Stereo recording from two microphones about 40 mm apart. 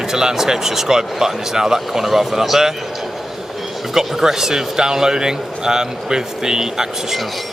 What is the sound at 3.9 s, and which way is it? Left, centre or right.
Speech, centre.